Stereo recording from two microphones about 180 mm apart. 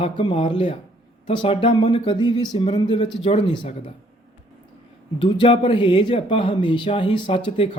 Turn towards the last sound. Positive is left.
turn(degrees=30)  # may be behind; listen again after turning